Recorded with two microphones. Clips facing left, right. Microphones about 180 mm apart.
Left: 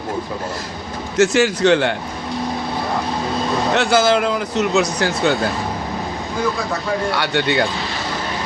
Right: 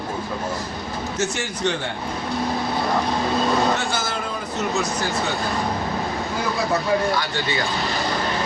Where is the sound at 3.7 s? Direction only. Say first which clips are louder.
Left 11 dB; 80° left.